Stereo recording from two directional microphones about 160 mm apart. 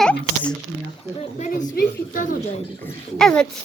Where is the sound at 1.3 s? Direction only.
55° left (ahead or behind).